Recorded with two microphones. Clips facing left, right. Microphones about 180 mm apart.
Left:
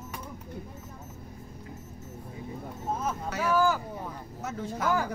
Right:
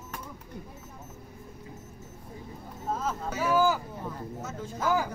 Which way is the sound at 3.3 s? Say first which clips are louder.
Right 1 dB; 5° right (ahead or behind).